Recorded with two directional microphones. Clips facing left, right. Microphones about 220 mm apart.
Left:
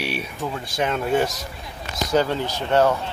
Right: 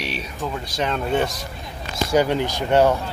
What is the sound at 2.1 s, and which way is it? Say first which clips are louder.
Speech: right 2 dB; 15° right (ahead or behind).